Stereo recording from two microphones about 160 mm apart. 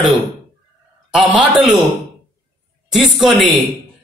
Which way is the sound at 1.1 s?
5° right (ahead or behind).